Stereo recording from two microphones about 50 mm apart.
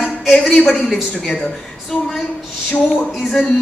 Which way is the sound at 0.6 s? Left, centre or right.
Centre.